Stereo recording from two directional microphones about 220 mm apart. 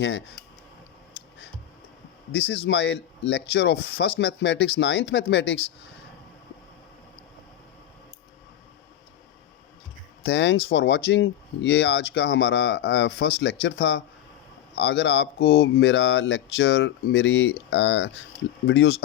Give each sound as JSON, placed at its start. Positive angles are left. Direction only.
{"t": 0.0, "sound": "speech", "side_deg": 55}
{"t": 2.3, "sound": "speech", "side_deg": 50}
{"t": 10.2, "sound": "speech", "side_deg": 50}